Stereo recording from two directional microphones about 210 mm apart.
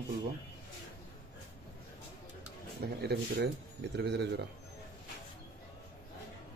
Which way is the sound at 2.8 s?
45° right (ahead or behind).